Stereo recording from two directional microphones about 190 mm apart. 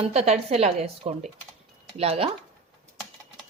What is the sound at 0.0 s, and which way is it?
Speech, 35° right (ahead or behind).